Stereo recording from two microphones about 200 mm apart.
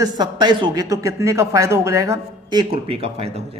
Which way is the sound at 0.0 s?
20° right (ahead or behind).